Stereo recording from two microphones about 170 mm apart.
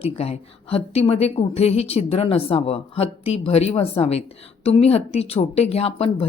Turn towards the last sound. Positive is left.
turn(degrees=35)  # may be behind; listen again after turning